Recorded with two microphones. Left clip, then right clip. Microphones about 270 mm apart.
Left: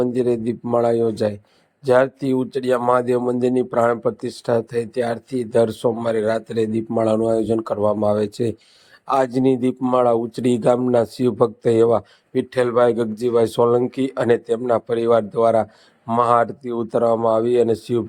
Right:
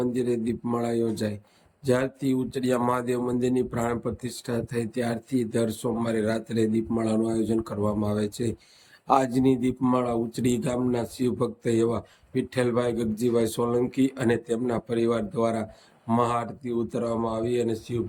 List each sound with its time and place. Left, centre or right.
0.0 s speech: centre